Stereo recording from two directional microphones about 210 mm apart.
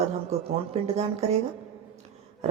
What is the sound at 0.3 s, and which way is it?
Speech, 30° right (ahead or behind).